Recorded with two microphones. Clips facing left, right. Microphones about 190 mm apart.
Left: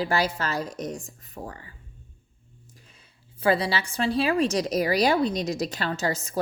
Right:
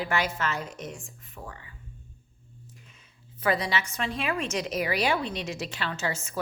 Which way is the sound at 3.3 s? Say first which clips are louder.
Left 4 dB; 30° left (ahead or behind).